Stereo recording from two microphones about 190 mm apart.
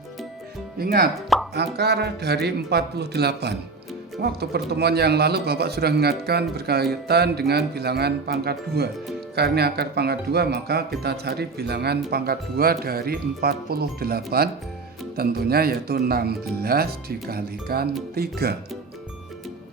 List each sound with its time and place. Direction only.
0.8 s a man's voice: 55° right (ahead or behind)